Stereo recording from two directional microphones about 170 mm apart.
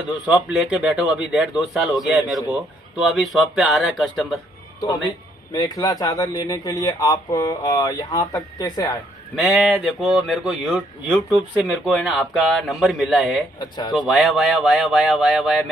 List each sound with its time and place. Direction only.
0.1 s a man's voice: 10° right (ahead or behind)
4.7 s a man's voice: 20° left (ahead or behind)
9.3 s speech: centre (ahead or behind)
13.6 s a man's voice: 25° left (ahead or behind)
13.9 s speech: centre (ahead or behind)